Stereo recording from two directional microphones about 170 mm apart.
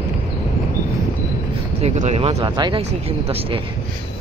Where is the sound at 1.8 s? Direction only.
40° right (ahead or behind).